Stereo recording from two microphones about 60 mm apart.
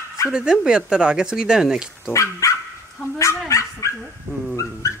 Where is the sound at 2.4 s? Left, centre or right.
Left.